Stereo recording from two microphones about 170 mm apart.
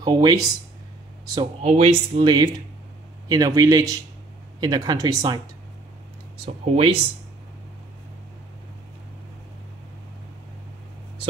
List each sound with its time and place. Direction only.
0.0 s speech: 25° right (ahead or behind)
1.6 s speech: 40° right (ahead or behind)
6.4 s speech: 35° right (ahead or behind)